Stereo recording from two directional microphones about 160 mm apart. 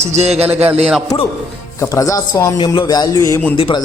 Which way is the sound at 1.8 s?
20° left (ahead or behind).